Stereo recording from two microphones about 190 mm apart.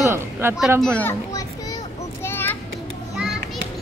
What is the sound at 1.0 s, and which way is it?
Speech, 15° left (ahead or behind).